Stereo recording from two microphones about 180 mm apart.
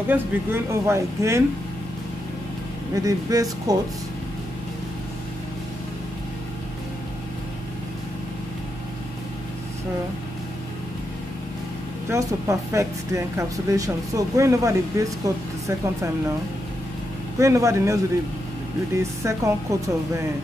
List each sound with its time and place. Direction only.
0.1 s speech: 15° right (ahead or behind)
2.9 s speech: 20° right (ahead or behind)
12.1 s speech: 15° right (ahead or behind)
17.4 s speech: 15° right (ahead or behind)
19.2 s speech: 15° right (ahead or behind)